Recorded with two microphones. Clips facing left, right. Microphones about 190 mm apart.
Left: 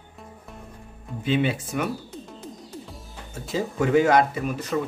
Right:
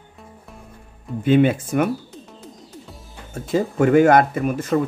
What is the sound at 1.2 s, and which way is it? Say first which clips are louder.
Speech: right 8 dB; 50° right (ahead or behind).